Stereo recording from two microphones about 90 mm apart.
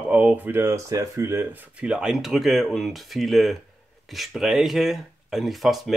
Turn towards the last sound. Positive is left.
turn(degrees=0)  # may be behind; listen again after turning